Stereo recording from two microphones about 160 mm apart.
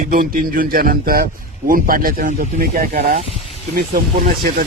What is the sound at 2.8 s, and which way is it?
Speech, 60° right (ahead or behind).